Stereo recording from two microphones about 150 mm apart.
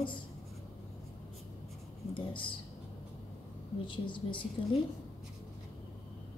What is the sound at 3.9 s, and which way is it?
Speech, 35° left (ahead or behind).